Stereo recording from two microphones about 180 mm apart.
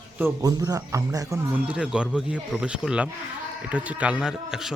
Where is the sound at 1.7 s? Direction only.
5° right (ahead or behind).